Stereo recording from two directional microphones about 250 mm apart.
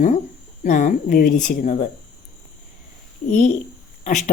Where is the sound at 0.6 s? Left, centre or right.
Left.